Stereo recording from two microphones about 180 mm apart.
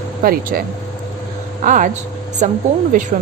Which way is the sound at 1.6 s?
45° right (ahead or behind).